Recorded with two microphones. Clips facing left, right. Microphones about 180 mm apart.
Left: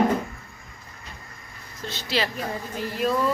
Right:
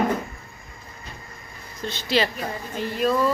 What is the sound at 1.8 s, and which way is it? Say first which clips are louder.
Speech: right 4 dB; centre (ahead or behind).